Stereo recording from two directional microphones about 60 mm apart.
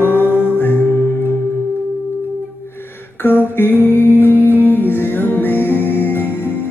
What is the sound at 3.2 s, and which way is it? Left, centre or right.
Mantra, left.